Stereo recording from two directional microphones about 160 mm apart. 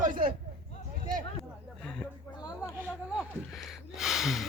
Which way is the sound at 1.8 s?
5° left (ahead or behind).